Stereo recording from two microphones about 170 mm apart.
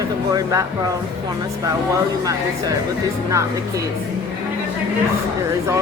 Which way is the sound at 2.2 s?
20° right (ahead or behind).